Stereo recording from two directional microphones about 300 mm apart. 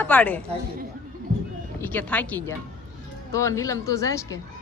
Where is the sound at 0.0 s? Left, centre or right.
Centre.